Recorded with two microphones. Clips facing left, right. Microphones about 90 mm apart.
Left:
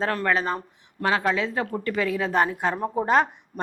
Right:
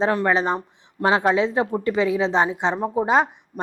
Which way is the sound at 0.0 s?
20° right (ahead or behind).